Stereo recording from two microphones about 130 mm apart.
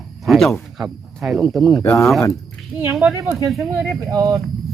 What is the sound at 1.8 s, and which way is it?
Speech, 20° left (ahead or behind).